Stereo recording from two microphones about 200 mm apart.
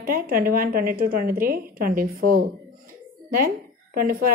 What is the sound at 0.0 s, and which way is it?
A woman's voice, 45° right (ahead or behind).